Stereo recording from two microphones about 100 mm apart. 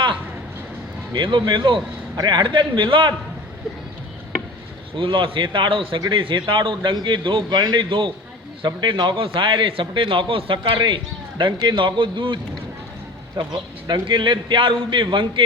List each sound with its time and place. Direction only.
1.1 s a man's voice: 50° right (ahead or behind)
4.9 s a man's voice: 60° right (ahead or behind)
10.6 s a man's voice: 50° right (ahead or behind)